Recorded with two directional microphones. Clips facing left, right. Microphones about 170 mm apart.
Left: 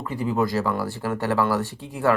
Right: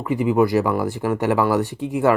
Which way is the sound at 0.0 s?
15° right (ahead or behind).